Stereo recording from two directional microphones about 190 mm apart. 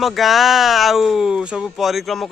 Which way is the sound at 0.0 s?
Centre (ahead or behind).